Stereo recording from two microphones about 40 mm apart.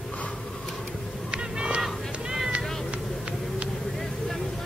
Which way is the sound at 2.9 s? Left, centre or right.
Right.